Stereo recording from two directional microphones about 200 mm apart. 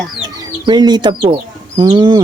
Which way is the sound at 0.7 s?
20° right (ahead or behind).